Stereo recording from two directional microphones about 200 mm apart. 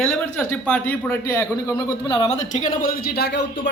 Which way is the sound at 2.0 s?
25° left (ahead or behind).